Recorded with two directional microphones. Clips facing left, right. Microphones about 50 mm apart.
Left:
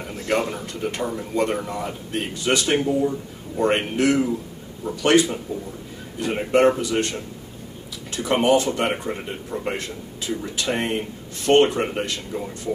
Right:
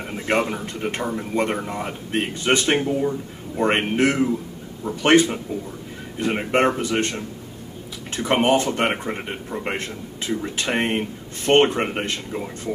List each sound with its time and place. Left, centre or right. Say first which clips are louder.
0.0 s speech: right 1 dB; right
8.1 s speech: even; right